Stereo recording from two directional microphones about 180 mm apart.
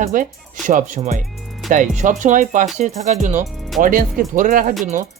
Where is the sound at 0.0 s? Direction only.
50° right (ahead or behind).